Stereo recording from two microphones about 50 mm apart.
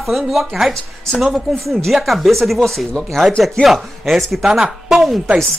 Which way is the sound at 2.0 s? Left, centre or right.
Centre.